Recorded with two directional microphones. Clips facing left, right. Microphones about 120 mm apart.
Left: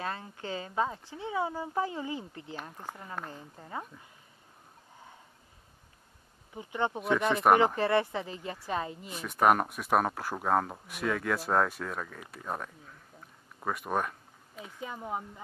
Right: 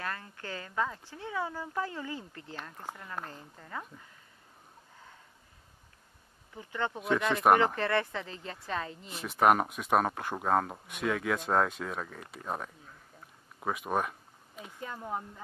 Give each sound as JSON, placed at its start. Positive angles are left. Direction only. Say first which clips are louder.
{"t": 0.0, "sound": "speech", "louder": "left 2 dB", "side_deg": 20}
{"t": 6.5, "sound": "speech", "louder": "left 3 dB", "side_deg": 20}
{"t": 7.0, "sound": "speech", "louder": "even", "side_deg": 5}
{"t": 7.5, "sound": "speech", "louder": "left 2 dB", "side_deg": 15}
{"t": 9.1, "sound": "speech", "louder": "even", "side_deg": -5}
{"t": 13.6, "sound": "a sound", "louder": "even", "side_deg": -5}
{"t": 14.8, "sound": "speech", "louder": "left 1 dB", "side_deg": 10}